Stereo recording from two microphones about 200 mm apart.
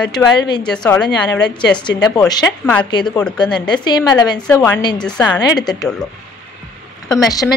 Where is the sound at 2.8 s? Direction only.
20° left (ahead or behind).